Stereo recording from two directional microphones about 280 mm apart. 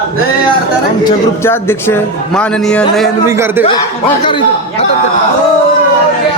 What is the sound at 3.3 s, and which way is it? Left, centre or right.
Speech, centre.